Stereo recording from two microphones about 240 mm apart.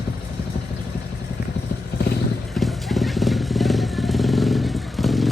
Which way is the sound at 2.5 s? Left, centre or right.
Centre.